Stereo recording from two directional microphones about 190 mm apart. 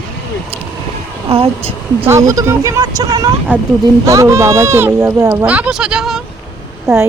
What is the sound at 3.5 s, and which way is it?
Speech, 10° right (ahead or behind).